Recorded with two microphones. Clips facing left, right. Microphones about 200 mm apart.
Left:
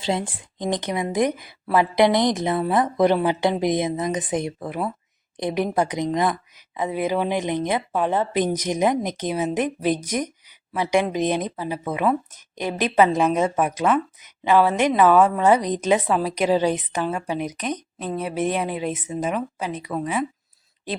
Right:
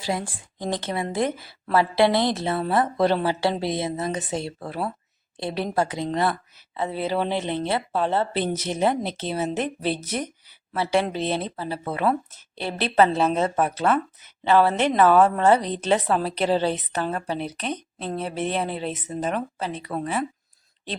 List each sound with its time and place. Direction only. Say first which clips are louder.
0.0 s a woman's voice: left 3 dB; 20° left (ahead or behind)